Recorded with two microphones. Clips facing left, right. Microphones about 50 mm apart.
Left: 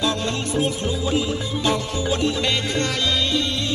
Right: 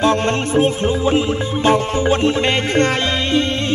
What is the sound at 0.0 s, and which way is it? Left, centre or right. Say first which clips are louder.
Music: right 7 dB; right.